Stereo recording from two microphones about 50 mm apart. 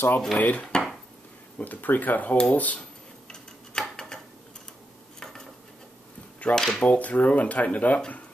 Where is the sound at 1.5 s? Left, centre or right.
Left.